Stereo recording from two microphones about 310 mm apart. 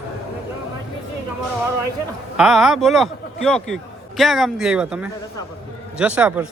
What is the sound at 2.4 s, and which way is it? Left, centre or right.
A man's voice, centre.